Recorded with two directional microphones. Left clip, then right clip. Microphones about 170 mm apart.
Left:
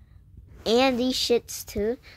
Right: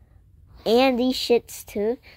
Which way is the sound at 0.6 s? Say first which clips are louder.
Right 3 dB; 30° right (ahead or behind).